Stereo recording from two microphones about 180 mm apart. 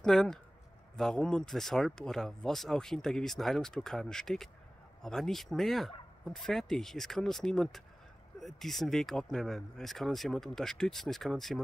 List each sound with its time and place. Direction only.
0.0 s speech: 5° left (ahead or behind)